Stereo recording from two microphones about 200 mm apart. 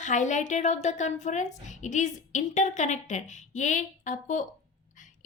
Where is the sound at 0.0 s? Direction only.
35° left (ahead or behind).